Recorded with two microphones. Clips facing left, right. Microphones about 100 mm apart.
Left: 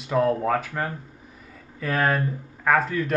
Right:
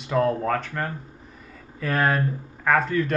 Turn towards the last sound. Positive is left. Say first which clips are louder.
# even
turn(degrees=0)  # may be behind; listen again after turning